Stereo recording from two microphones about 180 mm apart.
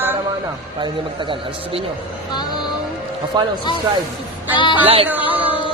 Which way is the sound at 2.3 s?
20° left (ahead or behind).